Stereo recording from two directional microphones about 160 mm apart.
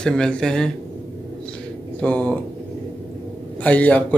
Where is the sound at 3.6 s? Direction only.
10° left (ahead or behind).